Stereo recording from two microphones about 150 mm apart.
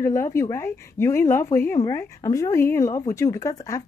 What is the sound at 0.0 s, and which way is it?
A woman's voice, 20° left (ahead or behind).